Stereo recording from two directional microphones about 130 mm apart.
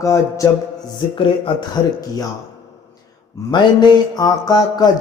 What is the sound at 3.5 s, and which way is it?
Mantra, 30° left (ahead or behind).